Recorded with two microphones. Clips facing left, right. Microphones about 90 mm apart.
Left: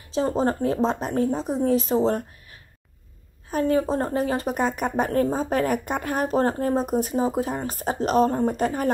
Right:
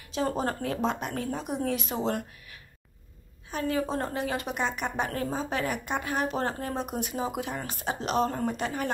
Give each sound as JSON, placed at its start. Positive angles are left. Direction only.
{"t": 0.1, "sound": "speech", "side_deg": 30}
{"t": 3.4, "sound": "a woman's voice", "side_deg": 40}